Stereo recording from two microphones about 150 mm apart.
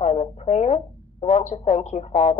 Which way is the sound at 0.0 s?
50° left (ahead or behind).